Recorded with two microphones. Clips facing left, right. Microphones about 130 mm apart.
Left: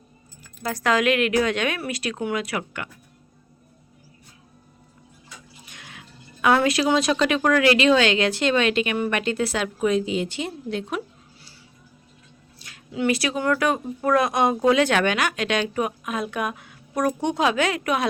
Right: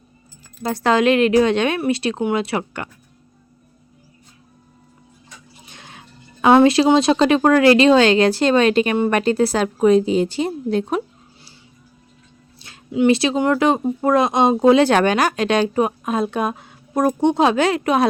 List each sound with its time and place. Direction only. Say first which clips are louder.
0.6 s a woman's voice: right 5 dB; 30° right (ahead or behind)
5.6 s speech: right 5 dB; 30° right (ahead or behind)
12.5 s speech: right 8 dB; 30° right (ahead or behind)